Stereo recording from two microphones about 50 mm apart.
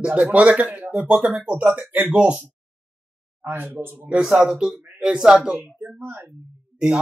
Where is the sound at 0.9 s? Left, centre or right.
Right.